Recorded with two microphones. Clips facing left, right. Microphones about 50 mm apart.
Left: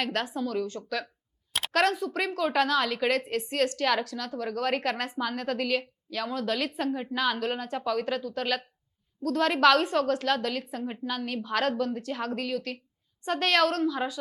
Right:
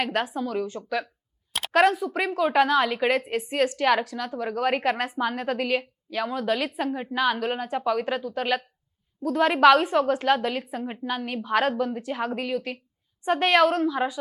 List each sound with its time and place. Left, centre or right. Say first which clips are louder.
0.0 s a woman's voice: right 3 dB; centre